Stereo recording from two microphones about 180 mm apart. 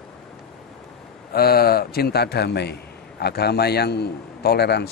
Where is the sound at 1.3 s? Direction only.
60° left (ahead or behind).